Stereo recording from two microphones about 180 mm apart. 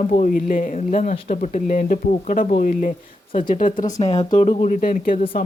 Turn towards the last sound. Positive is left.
turn(degrees=50)  # may be behind; listen again after turning